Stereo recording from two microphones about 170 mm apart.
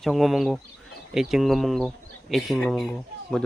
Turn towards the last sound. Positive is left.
turn(degrees=0)  # may be behind; listen again after turning